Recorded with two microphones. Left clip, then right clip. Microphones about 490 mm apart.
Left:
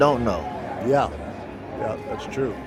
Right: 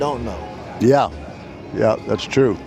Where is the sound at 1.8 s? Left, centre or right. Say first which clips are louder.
Right 11 dB; right.